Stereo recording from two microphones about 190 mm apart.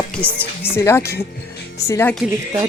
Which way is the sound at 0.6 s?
15° left (ahead or behind).